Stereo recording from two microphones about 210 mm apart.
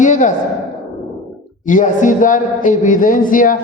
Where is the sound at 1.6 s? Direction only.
35° left (ahead or behind).